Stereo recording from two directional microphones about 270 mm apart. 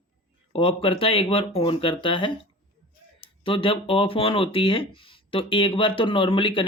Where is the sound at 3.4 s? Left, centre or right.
Centre.